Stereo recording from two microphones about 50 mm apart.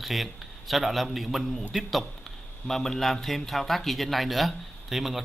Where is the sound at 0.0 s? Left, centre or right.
Centre.